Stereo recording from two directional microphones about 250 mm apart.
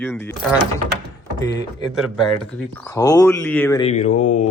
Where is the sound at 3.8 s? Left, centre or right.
Left.